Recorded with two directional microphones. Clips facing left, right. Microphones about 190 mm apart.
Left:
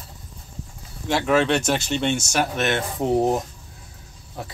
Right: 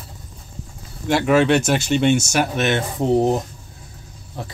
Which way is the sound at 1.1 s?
Centre (ahead or behind).